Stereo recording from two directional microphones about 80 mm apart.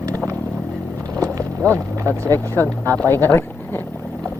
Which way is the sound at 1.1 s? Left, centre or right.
Right.